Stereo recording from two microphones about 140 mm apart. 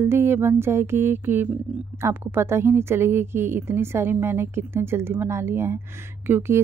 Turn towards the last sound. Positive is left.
turn(degrees=-15)  # may be behind; listen again after turning